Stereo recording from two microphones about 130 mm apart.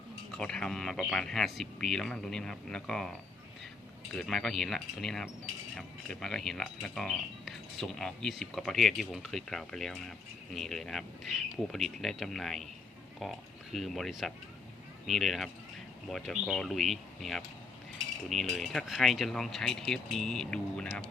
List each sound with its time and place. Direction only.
0.3 s speech: 5° left (ahead or behind)
4.1 s speech: 5° left (ahead or behind)